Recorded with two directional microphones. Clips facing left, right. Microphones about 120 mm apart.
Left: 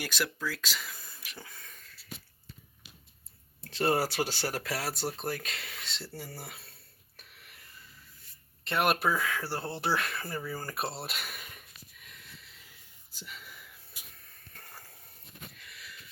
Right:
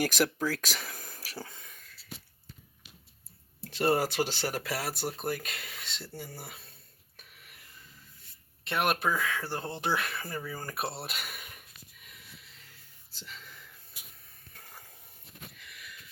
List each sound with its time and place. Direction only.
0.0 s speech: 45° right (ahead or behind)
1.7 s wheeze: centre (ahead or behind)
3.7 s speech: 10° right (ahead or behind)
4.2 s speech: 5° left (ahead or behind)
4.4 s speech: 10° right (ahead or behind)
7.2 s a sound: 5° right (ahead or behind)
8.6 s speech: centre (ahead or behind)
9.8 s speech: 5° right (ahead or behind)
11.9 s a sound: centre (ahead or behind)
15.6 s sniff: centre (ahead or behind)